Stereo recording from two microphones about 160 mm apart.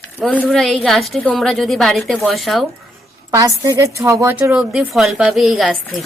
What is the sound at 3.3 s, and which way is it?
A woman's voice, 25° right (ahead or behind).